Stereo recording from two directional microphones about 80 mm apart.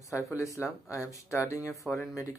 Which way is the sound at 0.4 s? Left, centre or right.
Left.